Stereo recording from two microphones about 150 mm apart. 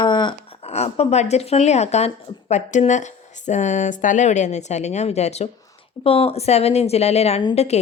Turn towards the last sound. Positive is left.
turn(degrees=45)  # may be behind; listen again after turning